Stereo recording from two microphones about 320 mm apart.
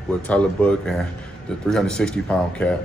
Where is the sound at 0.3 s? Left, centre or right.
Centre.